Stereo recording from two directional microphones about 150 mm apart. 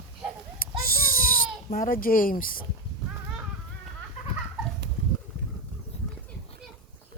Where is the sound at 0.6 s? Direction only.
70° left (ahead or behind).